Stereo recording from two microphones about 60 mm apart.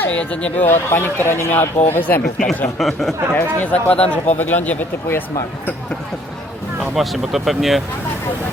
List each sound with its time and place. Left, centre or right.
0.0 s speech: left
0.6 s speech: left
2.7 s speech: centre
3.3 s speech: left
6.7 s speech: centre